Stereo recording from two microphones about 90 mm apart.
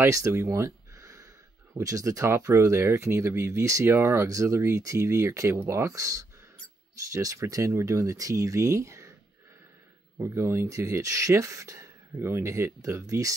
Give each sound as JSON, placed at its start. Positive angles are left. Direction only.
{"t": 0.0, "sound": "speech", "side_deg": -35}
{"t": 10.1, "sound": "speech", "side_deg": -30}
{"t": 12.2, "sound": "speech", "side_deg": -25}